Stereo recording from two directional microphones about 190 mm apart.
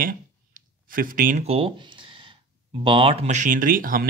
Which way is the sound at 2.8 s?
25° right (ahead or behind).